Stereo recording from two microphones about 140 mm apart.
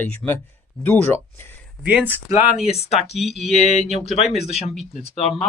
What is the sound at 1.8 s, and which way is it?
Speech, 10° right (ahead or behind).